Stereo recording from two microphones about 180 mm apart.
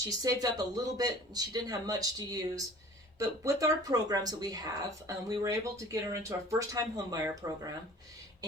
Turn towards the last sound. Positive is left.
turn(degrees=-20)  # may be behind; listen again after turning